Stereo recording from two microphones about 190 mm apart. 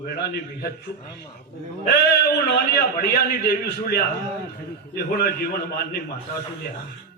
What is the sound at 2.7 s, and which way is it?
A man's voice, 55° left (ahead or behind).